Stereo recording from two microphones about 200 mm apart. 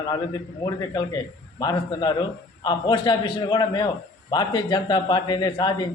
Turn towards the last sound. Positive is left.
turn(degrees=20)  # may be behind; listen again after turning